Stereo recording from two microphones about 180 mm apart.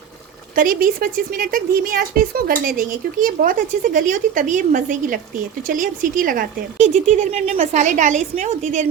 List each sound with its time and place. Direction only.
0.5 s a woman's voice: 50° right (ahead or behind)